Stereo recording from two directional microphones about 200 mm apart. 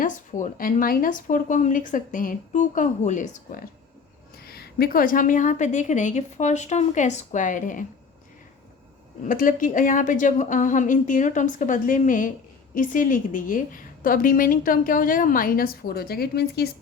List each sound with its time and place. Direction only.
0.0 s speech: 40° left (ahead or behind)
4.4 s speech: 50° left (ahead or behind)
9.2 s a woman's voice: 45° left (ahead or behind)